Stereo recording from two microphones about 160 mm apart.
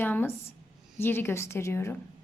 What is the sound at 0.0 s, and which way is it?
Speech, 10° left (ahead or behind).